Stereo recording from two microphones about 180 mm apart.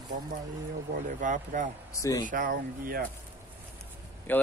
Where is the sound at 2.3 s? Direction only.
50° right (ahead or behind).